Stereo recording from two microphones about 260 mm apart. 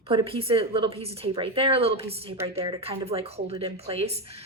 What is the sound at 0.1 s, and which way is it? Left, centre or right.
Speech, right.